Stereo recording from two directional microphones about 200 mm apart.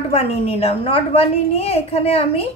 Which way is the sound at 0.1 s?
30° left (ahead or behind).